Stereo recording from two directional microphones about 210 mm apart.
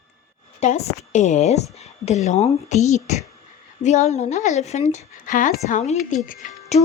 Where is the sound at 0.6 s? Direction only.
30° left (ahead or behind).